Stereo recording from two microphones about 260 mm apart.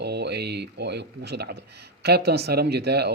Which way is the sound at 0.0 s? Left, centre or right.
Right.